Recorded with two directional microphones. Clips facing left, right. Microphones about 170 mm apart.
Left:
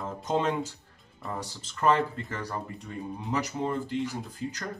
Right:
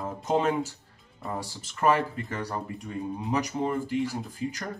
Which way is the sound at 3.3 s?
15° right (ahead or behind).